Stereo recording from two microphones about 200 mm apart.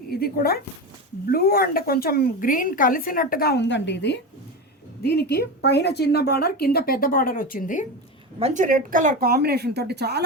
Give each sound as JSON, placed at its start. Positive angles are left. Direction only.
{"t": 0.1, "sound": "a woman's voice", "side_deg": 50}
{"t": 8.4, "sound": "speech", "side_deg": -35}